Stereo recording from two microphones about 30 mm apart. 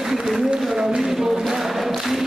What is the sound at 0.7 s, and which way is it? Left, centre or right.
Choir, centre.